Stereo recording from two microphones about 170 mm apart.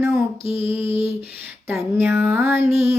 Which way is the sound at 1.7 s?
15° right (ahead or behind).